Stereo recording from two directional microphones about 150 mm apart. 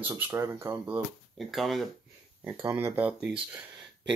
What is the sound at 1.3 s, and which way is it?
Speech, centre (ahead or behind).